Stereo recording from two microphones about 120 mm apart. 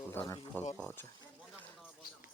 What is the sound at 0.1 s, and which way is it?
Speech, 15° left (ahead or behind).